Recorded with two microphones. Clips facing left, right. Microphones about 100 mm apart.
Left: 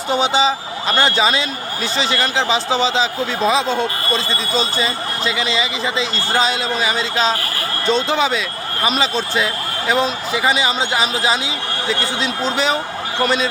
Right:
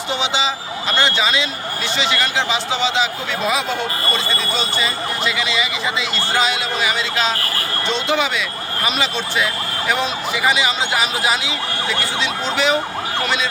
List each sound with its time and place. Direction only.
0.1 s speech: 40° left (ahead or behind)